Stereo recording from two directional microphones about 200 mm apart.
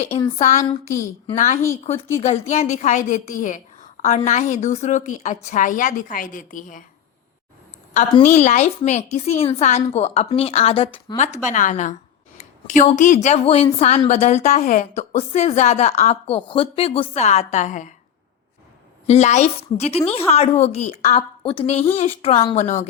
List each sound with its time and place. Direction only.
0.3 s a woman's voice: 40° left (ahead or behind)
8.2 s a woman's voice: 35° left (ahead or behind)
19.0 s a woman's voice: 35° left (ahead or behind)